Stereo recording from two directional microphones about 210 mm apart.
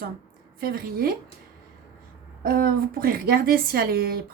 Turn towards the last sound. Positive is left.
turn(degrees=-45)  # may be behind; listen again after turning